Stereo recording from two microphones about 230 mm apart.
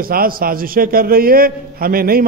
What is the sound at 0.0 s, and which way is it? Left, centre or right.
A man's voice, right.